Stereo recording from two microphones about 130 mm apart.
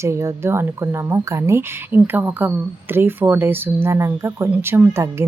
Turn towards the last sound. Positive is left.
turn(degrees=-20)  # may be behind; listen again after turning